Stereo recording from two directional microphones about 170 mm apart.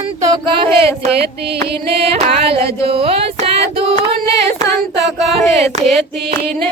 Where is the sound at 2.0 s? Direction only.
35° right (ahead or behind).